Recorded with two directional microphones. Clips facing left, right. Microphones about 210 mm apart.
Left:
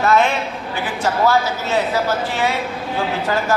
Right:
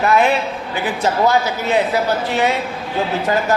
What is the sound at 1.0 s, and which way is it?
Speech, 20° right (ahead or behind).